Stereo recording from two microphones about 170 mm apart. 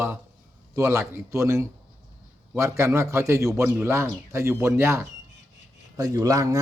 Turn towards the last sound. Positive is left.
turn(degrees=-20)  # may be behind; listen again after turning